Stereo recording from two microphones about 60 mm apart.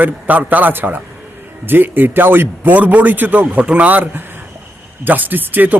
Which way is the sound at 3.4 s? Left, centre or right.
Right.